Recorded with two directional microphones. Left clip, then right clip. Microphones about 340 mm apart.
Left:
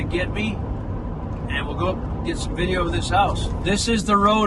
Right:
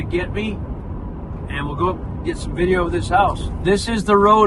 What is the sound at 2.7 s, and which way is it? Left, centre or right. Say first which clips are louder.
Speech: right 4 dB; centre.